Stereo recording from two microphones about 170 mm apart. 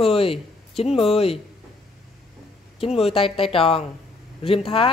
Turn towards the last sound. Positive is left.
turn(degrees=35)  # may be behind; listen again after turning